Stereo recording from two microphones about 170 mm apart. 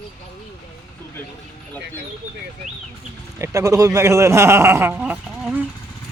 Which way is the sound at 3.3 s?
15° right (ahead or behind).